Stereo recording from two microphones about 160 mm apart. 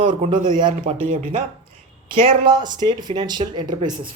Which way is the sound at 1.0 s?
55° right (ahead or behind).